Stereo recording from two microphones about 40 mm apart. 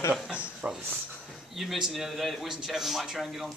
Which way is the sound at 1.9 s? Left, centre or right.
Centre.